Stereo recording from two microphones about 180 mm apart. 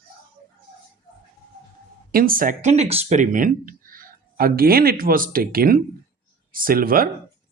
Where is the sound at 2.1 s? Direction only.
50° right (ahead or behind).